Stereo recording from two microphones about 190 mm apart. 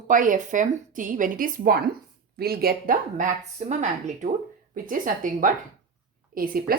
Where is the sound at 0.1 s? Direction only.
45° right (ahead or behind).